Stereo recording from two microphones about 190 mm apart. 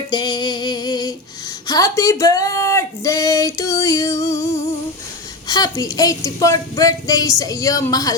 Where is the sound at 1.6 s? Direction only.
20° left (ahead or behind).